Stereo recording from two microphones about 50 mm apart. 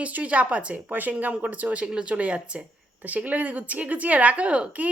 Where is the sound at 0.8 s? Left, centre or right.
Right.